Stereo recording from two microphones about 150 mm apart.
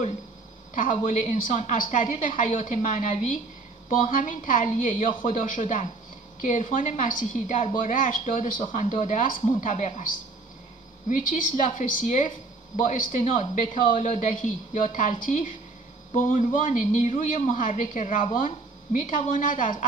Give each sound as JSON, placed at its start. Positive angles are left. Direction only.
{"t": 0.7, "sound": "a woman's voice", "side_deg": 60}
{"t": 11.1, "sound": "a woman's voice", "side_deg": 60}